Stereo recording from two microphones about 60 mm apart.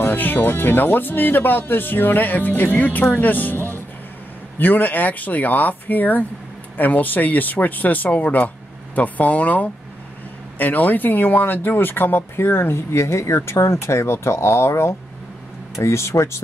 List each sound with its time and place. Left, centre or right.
0.0 s speech: left